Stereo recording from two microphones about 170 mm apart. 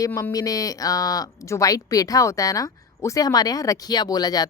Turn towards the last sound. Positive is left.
turn(degrees=25)  # may be behind; listen again after turning